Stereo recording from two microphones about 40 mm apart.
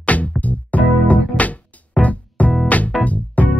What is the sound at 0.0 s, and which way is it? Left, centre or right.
Music, left.